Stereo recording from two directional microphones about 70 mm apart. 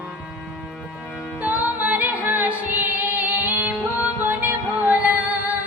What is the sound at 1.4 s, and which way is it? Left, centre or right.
Music, right.